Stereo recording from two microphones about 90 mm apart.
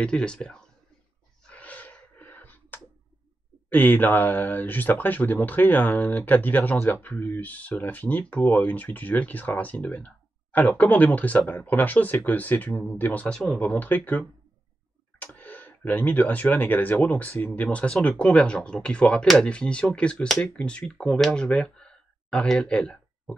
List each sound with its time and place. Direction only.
0.0 s speech: 10° left (ahead or behind)
1.5 s a sound: 15° left (ahead or behind)
3.7 s speech: 20° left (ahead or behind)